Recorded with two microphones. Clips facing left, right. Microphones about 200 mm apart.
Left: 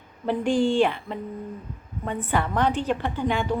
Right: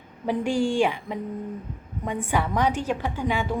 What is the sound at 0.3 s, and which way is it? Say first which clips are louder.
A woman's voice: left 2 dB; 10° right (ahead or behind).